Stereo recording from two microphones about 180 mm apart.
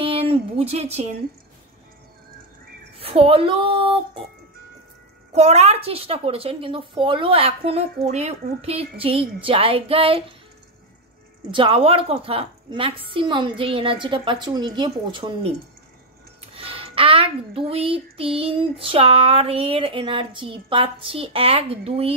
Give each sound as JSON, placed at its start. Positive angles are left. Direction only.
{"t": 0.0, "sound": "a sound", "side_deg": -30}
{"t": 3.0, "sound": "speech", "side_deg": -30}
{"t": 5.3, "sound": "speech", "side_deg": -35}
{"t": 11.5, "sound": "a woman's voice", "side_deg": -30}
{"t": 16.5, "sound": "speech", "side_deg": -30}